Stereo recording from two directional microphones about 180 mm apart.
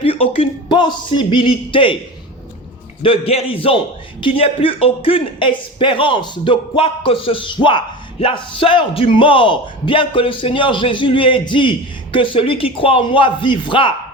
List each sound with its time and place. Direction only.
0.0 s speech: 30° left (ahead or behind)
3.0 s a man's voice: 30° left (ahead or behind)